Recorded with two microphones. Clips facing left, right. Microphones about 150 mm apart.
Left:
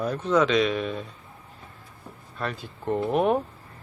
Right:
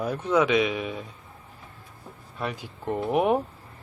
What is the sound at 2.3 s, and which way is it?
Speech, 15° right (ahead or behind).